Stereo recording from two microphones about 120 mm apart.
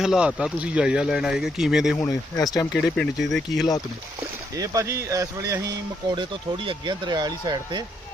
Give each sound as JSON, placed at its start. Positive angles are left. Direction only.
{"t": 0.0, "sound": "speech", "side_deg": -5}
{"t": 2.0, "sound": "speech", "side_deg": 30}
{"t": 2.7, "sound": "speech", "side_deg": 5}
{"t": 4.2, "sound": "speech", "side_deg": -30}
{"t": 6.7, "sound": "speech", "side_deg": -40}